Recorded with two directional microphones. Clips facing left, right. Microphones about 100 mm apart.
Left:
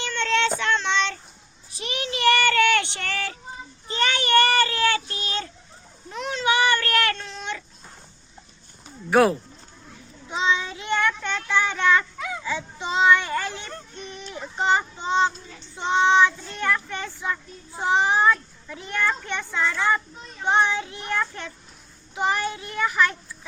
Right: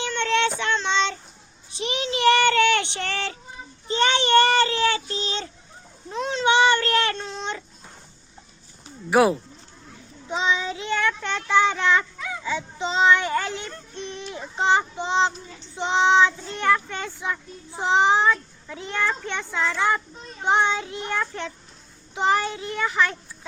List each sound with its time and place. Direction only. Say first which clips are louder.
0.0 s child singing: right 1 dB; 15° right (ahead or behind)
3.8 s a sound: right 3 dB; 25° right (ahead or behind)
9.0 s speech: even; 5° right (ahead or behind)
10.2 s child singing: even; 25° right (ahead or behind)
20.4 s a child's voice: even; 20° right (ahead or behind)